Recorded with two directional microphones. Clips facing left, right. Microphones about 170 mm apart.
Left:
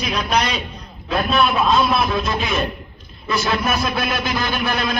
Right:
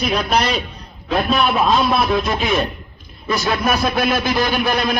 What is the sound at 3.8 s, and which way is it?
A man's voice, 35° right (ahead or behind).